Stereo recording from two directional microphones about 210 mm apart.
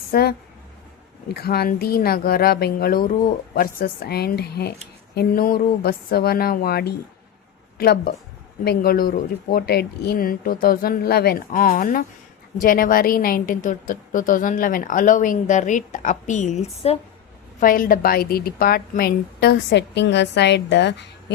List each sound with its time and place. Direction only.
0.1 s a woman's voice: 50° left (ahead or behind); by 17.0 s 30° left (ahead or behind)
17.6 s a woman's voice: 40° left (ahead or behind)